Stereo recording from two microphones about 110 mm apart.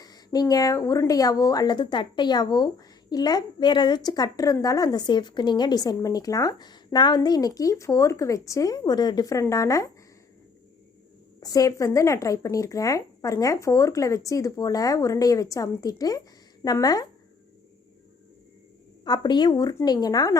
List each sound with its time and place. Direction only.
0.3 s a woman's voice: 35° left (ahead or behind)
11.3 s a woman's voice: 35° left (ahead or behind)
19.0 s a woman's voice: 40° left (ahead or behind)